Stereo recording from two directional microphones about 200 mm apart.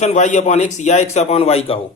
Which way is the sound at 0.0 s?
35° left (ahead or behind).